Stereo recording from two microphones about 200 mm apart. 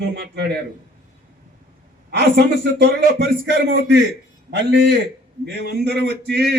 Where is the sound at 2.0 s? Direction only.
55° right (ahead or behind).